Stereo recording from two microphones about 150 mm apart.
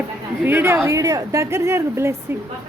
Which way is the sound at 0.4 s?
15° right (ahead or behind).